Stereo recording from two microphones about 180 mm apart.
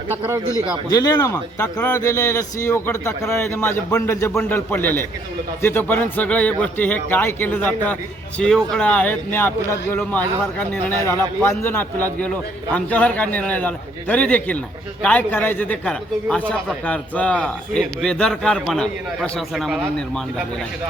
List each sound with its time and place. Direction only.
0.5 s a man's voice: 20° left (ahead or behind); by 20.2 s centre (ahead or behind)